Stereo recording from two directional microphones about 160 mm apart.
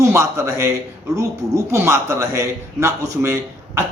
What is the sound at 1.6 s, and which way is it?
Speech, 15° right (ahead or behind).